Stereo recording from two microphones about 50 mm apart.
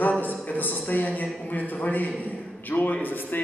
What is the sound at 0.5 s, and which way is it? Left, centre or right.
A man's voice, left.